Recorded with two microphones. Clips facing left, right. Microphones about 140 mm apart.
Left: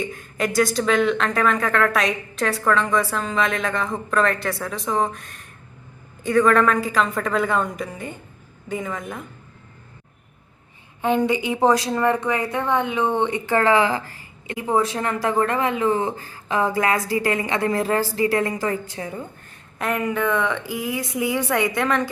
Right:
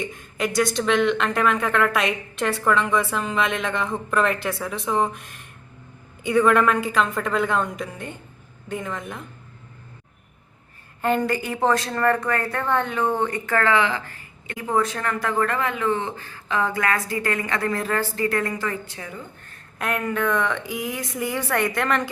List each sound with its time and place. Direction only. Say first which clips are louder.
0.0 s speech: left 2 dB; centre (ahead or behind)
11.3 s speech: left 3 dB; centre (ahead or behind)
11.9 s a woman's voice: left 1 dB; 10° left (ahead or behind); by 19.2 s 25° left (ahead or behind)
19.8 s a woman's voice: left 2 dB; centre (ahead or behind)